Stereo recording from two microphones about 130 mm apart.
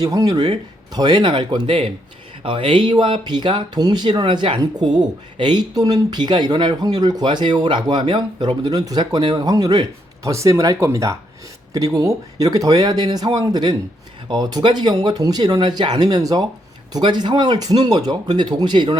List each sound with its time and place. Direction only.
0.0 s speech: 30° right (ahead or behind)